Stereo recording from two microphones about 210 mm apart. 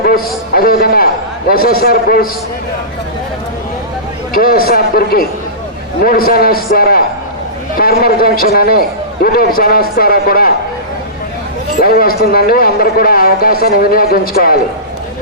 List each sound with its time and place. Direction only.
0.0 s a man's voice: 45° left (ahead or behind)
4.3 s a man's voice: 45° left (ahead or behind)
11.8 s a man's voice: 45° left (ahead or behind)